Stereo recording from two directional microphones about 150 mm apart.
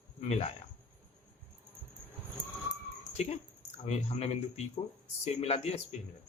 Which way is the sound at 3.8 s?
45° left (ahead or behind).